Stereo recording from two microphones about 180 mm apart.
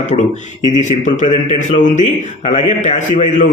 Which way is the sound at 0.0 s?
40° left (ahead or behind).